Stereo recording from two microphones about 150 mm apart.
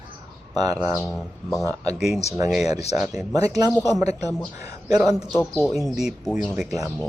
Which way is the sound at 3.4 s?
25° right (ahead or behind).